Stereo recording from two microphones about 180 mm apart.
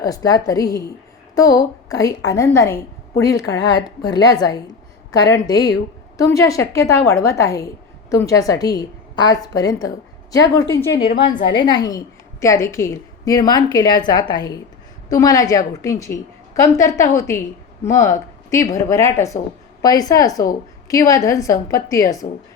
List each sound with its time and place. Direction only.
0.0 s a woman's voice: 20° left (ahead or behind)